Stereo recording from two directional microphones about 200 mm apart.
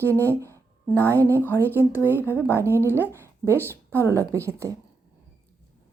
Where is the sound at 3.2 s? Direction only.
15° right (ahead or behind).